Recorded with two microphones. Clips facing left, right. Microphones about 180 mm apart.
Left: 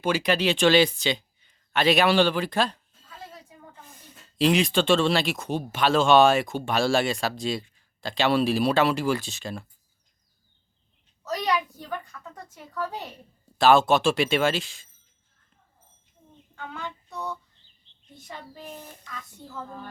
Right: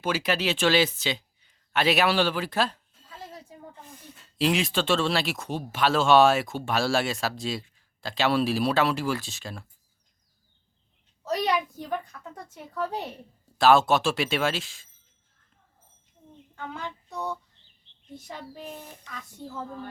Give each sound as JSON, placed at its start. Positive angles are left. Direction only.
{"t": 0.0, "sound": "speech", "side_deg": -5}
{"t": 4.4, "sound": "speech", "side_deg": 0}
{"t": 12.7, "sound": "a woman's voice", "side_deg": -25}
{"t": 13.6, "sound": "speech", "side_deg": 0}
{"t": 16.8, "sound": "a sound", "side_deg": -20}